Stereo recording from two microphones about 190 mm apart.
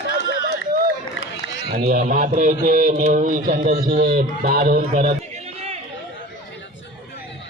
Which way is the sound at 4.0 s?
50° right (ahead or behind).